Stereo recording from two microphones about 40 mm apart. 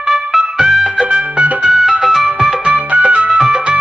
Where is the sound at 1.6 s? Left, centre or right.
Right.